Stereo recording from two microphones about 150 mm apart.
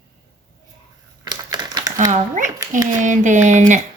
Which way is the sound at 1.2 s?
30° right (ahead or behind).